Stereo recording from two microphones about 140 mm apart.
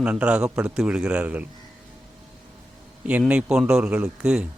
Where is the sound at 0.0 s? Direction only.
10° right (ahead or behind).